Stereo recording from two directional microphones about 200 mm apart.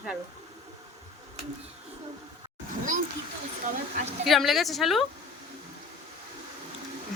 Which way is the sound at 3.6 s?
40° right (ahead or behind).